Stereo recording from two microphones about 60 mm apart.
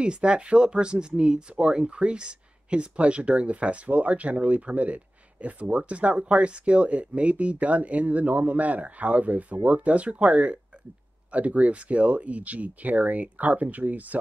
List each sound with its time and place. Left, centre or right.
0.0 s speech: centre